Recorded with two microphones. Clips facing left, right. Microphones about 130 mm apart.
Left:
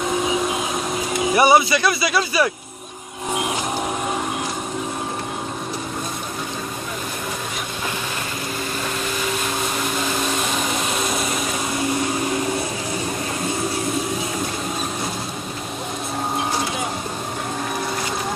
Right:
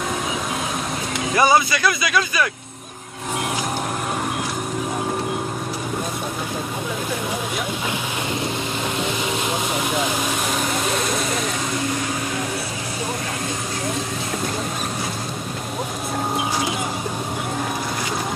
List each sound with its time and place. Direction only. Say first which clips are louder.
1.3 s speech: left 2 dB; 25° left (ahead or behind)